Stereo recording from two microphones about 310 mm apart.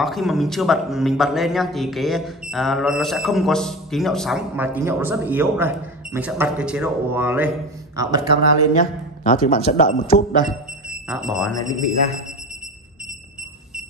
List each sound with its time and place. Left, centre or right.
0.0 s a man's voice: centre
9.2 s speech: left
11.1 s a man's voice: centre
11.5 s speech: centre